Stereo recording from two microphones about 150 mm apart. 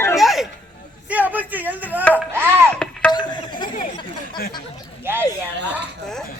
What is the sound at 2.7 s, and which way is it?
Music, 5° left (ahead or behind).